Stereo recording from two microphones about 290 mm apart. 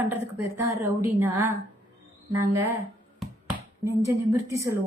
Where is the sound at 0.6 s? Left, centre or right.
Centre.